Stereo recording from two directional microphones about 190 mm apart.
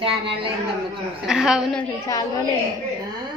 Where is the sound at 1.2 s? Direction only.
5° right (ahead or behind).